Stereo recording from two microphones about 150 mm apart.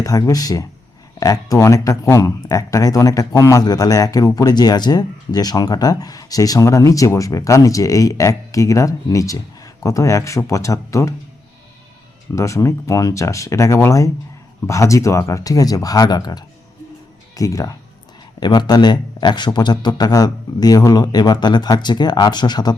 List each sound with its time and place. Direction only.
0.0 s speech: 25° left (ahead or behind)
12.3 s speech: 20° left (ahead or behind)